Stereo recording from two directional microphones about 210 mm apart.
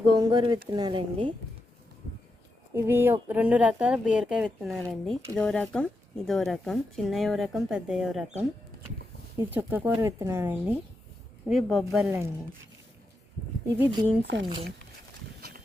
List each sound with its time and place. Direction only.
0.1 s speech: 20° right (ahead or behind)
2.7 s speech: 10° right (ahead or behind)
13.7 s speech: 10° right (ahead or behind)
14.2 s speech: 55° right (ahead or behind)
15.4 s horse: 45° right (ahead or behind)